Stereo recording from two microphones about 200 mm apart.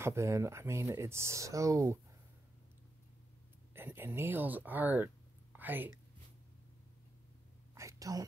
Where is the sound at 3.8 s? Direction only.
10° right (ahead or behind).